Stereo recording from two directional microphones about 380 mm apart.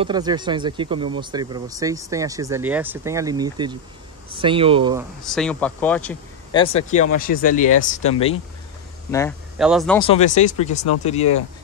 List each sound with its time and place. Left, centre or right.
0.0 s speech: centre
5.2 s speech: centre
9.1 s speech: centre
10.0 s speech: centre